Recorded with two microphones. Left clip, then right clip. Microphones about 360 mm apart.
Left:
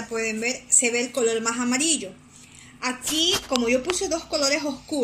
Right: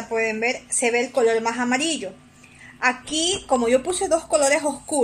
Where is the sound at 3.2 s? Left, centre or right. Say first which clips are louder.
Right 2 dB; right.